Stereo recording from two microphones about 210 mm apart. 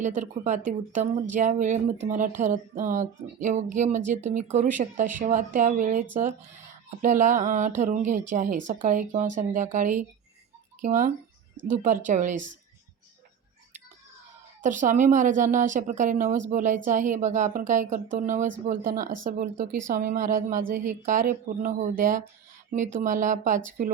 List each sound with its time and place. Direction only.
0.0 s speech: 35° right (ahead or behind)
14.6 s speech: 35° right (ahead or behind)